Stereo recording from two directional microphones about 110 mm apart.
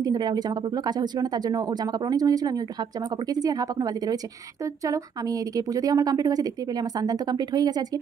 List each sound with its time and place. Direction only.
0.0 s speech: 40° right (ahead or behind)